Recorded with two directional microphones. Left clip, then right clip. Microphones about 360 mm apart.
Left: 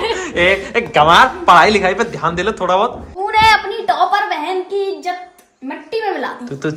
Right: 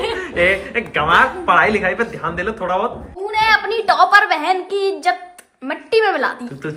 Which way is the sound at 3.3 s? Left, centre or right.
Left.